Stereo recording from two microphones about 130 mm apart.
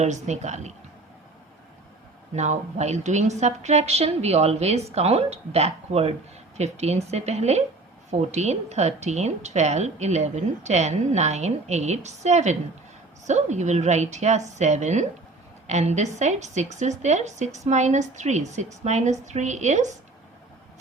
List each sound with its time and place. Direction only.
0.0 s a woman's voice: 60° right (ahead or behind)
2.3 s a woman's voice: 60° right (ahead or behind)